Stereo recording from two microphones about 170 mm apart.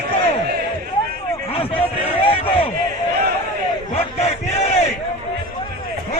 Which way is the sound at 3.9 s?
40° left (ahead or behind).